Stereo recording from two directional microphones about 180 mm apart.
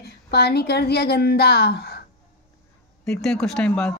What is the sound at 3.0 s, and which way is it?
Speech, 5° left (ahead or behind).